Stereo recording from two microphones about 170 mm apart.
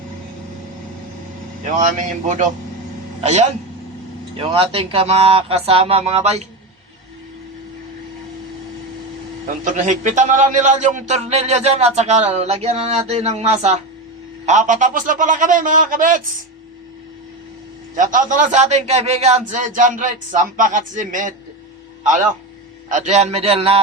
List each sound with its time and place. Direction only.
1.8 s a man's voice: 50° right (ahead or behind)
4.4 s a man's voice: 35° right (ahead or behind)
9.7 s a man's voice: 45° right (ahead or behind)
17.9 s a man's voice: 50° right (ahead or behind)
22.9 s a man's voice: 45° right (ahead or behind)